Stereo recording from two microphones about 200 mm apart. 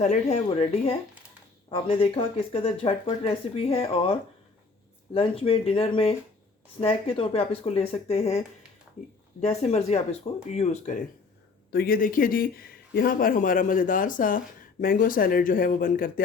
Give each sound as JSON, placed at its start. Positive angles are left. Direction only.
{"t": 0.0, "sound": "speech", "side_deg": 35}
{"t": 11.7, "sound": "speech", "side_deg": 50}